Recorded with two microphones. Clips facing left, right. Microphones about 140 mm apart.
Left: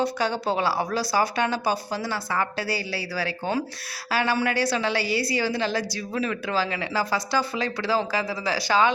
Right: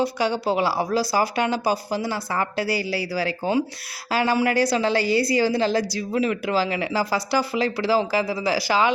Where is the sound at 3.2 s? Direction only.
15° right (ahead or behind).